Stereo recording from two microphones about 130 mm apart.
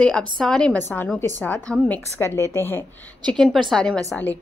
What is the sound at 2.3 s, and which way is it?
Speech, 20° left (ahead or behind).